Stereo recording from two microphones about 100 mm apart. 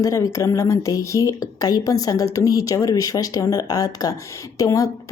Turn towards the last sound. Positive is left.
turn(degrees=35)  # may be behind; listen again after turning